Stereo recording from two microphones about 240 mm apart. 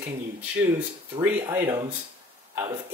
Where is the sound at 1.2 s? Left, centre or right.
Centre.